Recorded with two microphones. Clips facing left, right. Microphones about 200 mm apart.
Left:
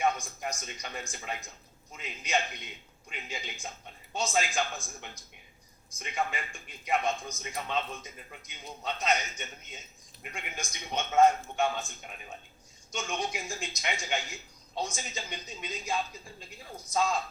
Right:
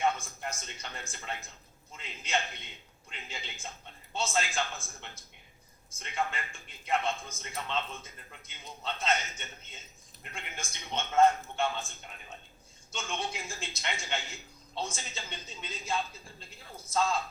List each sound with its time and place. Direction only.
0.0 s a man's voice: 15° left (ahead or behind)